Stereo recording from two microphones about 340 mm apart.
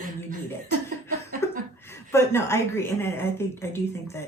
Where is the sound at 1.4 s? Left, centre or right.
Centre.